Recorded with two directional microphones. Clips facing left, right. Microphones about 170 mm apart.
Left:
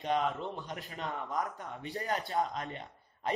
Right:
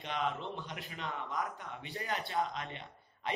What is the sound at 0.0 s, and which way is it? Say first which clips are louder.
A man's voice: left 5 dB; 45° left (ahead or behind).